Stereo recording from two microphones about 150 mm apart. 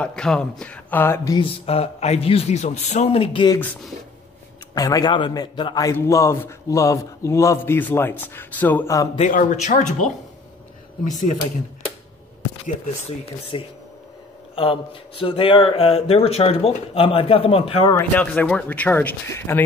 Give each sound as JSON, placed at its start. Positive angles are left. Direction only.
{"t": 0.0, "sound": "speech", "side_deg": 5}
{"t": 1.3, "sound": "speech", "side_deg": 40}
{"t": 4.7, "sound": "a man's voice", "side_deg": 25}
{"t": 9.2, "sound": "speech", "side_deg": 60}
{"t": 13.2, "sound": "speech", "side_deg": 35}
{"t": 17.9, "sound": "speech", "side_deg": 10}